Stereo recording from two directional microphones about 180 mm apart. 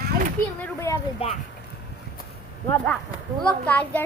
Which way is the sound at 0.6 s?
15° left (ahead or behind).